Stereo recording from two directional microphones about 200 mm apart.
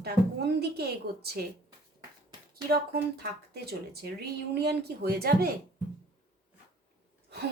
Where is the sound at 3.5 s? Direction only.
50° right (ahead or behind).